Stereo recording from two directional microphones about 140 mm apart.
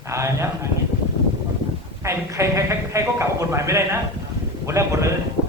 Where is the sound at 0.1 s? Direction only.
20° right (ahead or behind).